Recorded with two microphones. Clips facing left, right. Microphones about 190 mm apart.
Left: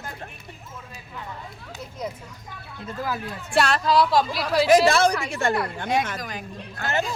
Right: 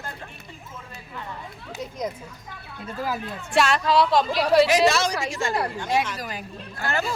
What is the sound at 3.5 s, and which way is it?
Speech, centre (ahead or behind).